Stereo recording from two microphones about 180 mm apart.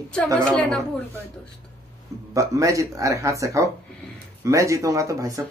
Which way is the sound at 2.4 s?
15° right (ahead or behind).